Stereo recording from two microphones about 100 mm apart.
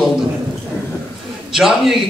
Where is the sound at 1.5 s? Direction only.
5° right (ahead or behind).